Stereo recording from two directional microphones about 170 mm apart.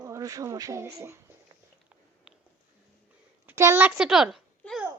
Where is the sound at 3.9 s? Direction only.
5° right (ahead or behind).